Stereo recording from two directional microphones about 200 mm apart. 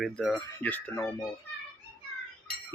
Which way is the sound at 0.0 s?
5° left (ahead or behind).